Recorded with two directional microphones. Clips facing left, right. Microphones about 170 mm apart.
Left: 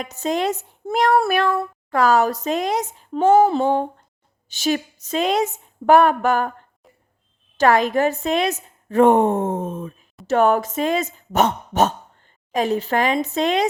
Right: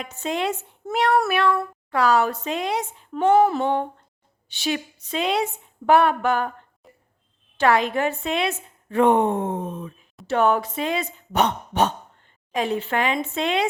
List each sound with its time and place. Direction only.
0.0 s speech: 40° left (ahead or behind)
1.9 s speech: 45° left (ahead or behind); by 3.8 s 30° left (ahead or behind)
4.4 s a woman's voice: 45° left (ahead or behind)
6.8 s a sound: centre (ahead or behind)
7.6 s a woman's voice: 45° left (ahead or behind)